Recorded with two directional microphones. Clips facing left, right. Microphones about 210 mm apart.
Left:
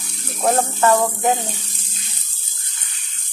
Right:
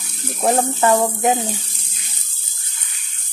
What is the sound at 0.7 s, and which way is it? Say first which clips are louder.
Speech: even; 15° right (ahead or behind).